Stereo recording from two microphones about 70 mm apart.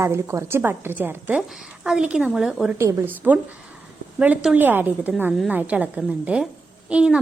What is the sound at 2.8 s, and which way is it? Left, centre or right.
Speech, right.